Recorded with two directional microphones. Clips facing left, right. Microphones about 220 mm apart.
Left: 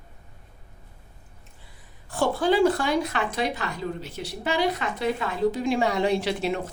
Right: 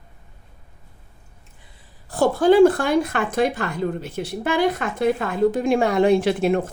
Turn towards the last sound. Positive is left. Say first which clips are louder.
# right 7 dB
turn(degrees=-50)  # may be behind; listen again after turning